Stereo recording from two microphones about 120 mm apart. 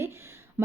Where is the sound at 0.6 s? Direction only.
15° right (ahead or behind).